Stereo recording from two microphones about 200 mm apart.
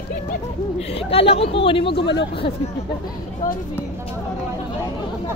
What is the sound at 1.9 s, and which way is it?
Speech, 60° left (ahead or behind).